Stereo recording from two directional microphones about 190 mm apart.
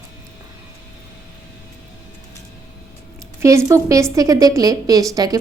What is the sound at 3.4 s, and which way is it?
A woman's voice, 15° right (ahead or behind).